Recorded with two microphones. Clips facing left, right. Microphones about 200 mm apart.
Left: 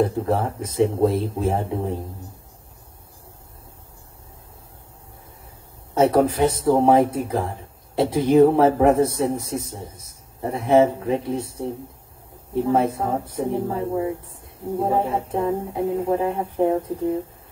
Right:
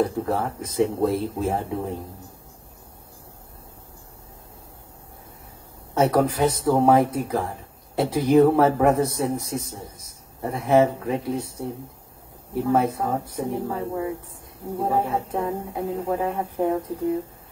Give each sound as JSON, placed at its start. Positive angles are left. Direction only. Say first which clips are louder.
{"t": 0.0, "sound": "speech", "louder": "left 2 dB", "side_deg": 25}
{"t": 5.9, "sound": "speech", "louder": "left 3 dB", "side_deg": 25}
{"t": 11.3, "sound": "speech", "louder": "left 2 dB", "side_deg": 0}
{"t": 12.6, "sound": "speech", "louder": "even", "side_deg": 30}